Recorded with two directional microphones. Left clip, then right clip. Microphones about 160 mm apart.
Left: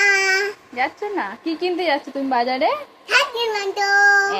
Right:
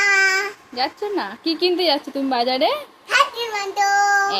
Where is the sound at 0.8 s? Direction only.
20° right (ahead or behind).